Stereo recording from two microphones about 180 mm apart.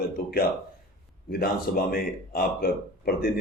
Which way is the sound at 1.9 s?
55° left (ahead or behind).